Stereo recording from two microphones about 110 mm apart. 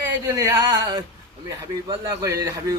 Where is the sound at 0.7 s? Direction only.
45° right (ahead or behind).